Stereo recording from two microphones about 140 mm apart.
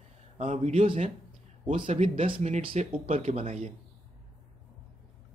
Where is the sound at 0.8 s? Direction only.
40° right (ahead or behind).